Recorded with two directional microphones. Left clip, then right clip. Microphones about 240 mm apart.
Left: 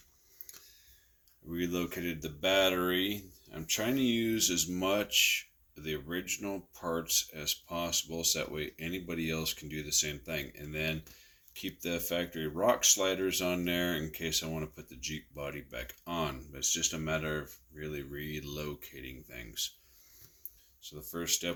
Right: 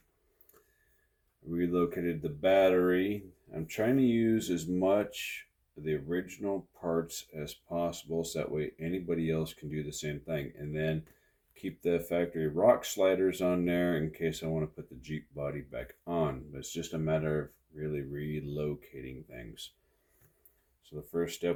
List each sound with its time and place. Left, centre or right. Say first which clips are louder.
1.5 s speech: right 5 dB; centre
21.1 s speech: right 3 dB; centre